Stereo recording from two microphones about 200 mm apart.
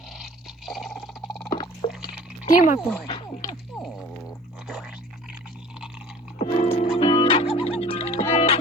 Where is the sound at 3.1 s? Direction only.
25° left (ahead or behind).